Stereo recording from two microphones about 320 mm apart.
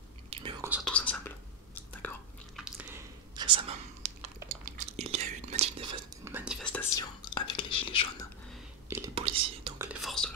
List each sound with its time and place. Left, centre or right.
0.3 s whispering: centre
0.7 s whispering: centre
6.2 s whispering: centre
7.3 s whispering: centre
8.9 s whispering: centre
9.8 s whispering: centre